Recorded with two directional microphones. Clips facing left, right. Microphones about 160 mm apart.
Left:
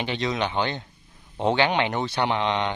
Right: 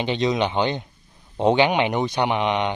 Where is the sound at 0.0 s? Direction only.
20° right (ahead or behind).